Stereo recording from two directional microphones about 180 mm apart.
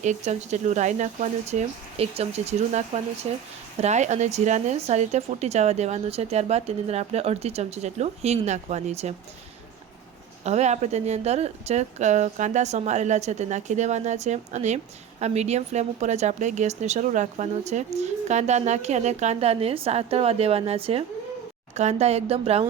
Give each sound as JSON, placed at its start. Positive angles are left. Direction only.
{"t": 0.0, "sound": "speech", "side_deg": -40}
{"t": 10.4, "sound": "speech", "side_deg": -40}